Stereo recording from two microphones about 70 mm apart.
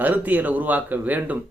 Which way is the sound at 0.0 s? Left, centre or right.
Right.